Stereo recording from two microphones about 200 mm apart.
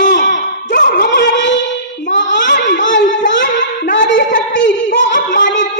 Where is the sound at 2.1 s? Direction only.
65° left (ahead or behind).